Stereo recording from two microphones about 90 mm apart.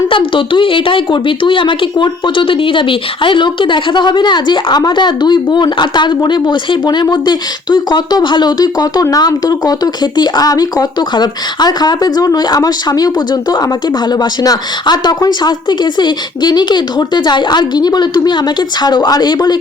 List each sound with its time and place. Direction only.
0.1 s speech: 70° left (ahead or behind); by 19.5 s 50° left (ahead or behind)